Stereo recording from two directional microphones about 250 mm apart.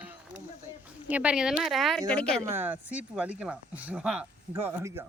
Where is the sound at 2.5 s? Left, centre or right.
Centre.